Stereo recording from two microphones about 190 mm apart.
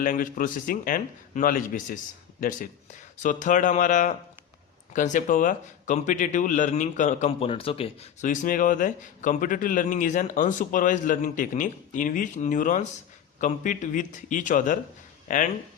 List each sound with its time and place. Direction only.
0.0 s speech: 45° left (ahead or behind)